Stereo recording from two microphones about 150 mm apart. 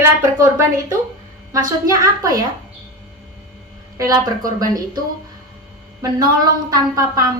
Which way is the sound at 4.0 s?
25° right (ahead or behind).